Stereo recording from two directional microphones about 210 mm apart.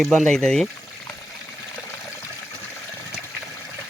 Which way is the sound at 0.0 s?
Centre (ahead or behind).